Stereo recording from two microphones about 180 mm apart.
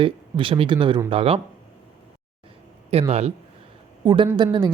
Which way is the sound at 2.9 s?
35° right (ahead or behind).